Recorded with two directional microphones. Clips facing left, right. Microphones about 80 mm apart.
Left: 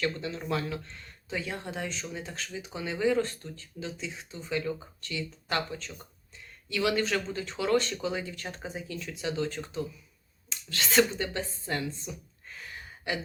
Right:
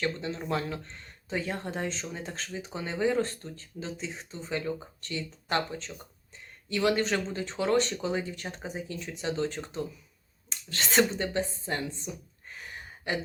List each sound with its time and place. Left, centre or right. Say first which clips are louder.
0.0 s speech: even; right
8.4 s speech: right 1 dB; centre
12.5 s a sound: right 1 dB; right